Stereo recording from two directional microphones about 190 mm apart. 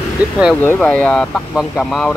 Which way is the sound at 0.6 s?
10° left (ahead or behind).